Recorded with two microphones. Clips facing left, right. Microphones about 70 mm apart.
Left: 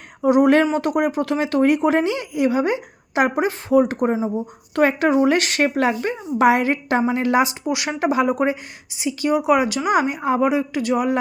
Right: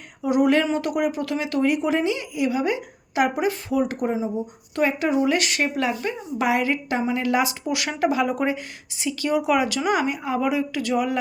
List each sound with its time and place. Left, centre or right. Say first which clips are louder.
0.2 s speech: left 5 dB; left
4.7 s speech: left 5 dB; left
7.6 s speech: left 2 dB; centre